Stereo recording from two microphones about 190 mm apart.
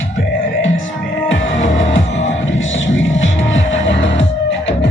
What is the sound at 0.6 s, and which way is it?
Music, 85° left.